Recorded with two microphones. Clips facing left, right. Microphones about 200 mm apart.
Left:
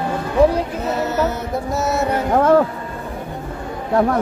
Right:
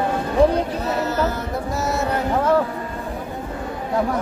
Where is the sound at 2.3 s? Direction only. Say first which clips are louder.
Left 5 dB; 55° left (ahead or behind).